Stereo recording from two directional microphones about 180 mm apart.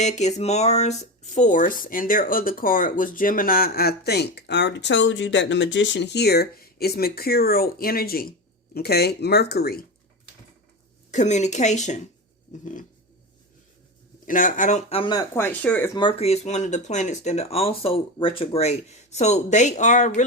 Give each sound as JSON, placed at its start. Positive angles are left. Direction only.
{"t": 0.0, "sound": "speech", "side_deg": 40}
{"t": 11.1, "sound": "speech", "side_deg": 40}
{"t": 14.3, "sound": "speech", "side_deg": 50}
{"t": 15.1, "sound": "speech", "side_deg": 10}
{"t": 16.0, "sound": "speech", "side_deg": 30}